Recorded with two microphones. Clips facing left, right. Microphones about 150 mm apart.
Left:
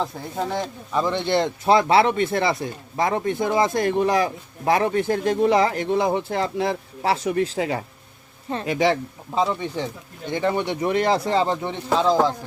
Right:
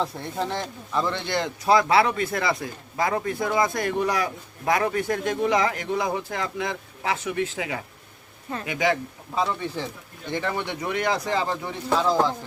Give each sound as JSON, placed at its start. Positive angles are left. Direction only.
{"t": 0.0, "sound": "speech", "side_deg": 0}
{"t": 0.9, "sound": "speech", "side_deg": 20}